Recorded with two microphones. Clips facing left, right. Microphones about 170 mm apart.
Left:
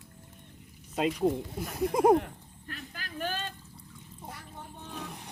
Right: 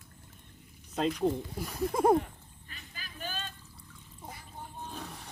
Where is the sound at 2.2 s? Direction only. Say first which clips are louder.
Even; 70° left (ahead or behind).